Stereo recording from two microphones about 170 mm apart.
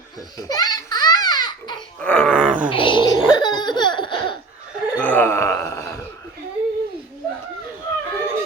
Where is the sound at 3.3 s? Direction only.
25° left (ahead or behind).